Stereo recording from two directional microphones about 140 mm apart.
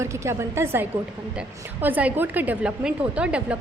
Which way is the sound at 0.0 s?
20° right (ahead or behind).